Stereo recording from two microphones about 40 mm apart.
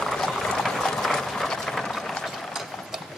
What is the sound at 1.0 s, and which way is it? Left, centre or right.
Clip-clop, centre.